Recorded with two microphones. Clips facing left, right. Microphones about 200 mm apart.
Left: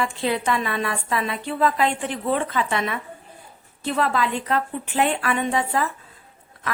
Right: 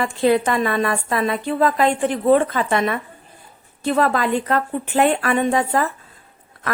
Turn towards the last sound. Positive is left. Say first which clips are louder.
# right 4 dB
turn(degrees=-45)  # may be behind; listen again after turning